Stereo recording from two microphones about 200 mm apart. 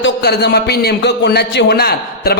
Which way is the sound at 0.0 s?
55° left (ahead or behind).